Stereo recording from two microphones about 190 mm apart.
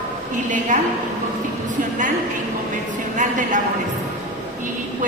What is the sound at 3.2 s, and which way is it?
Speech, 40° right (ahead or behind).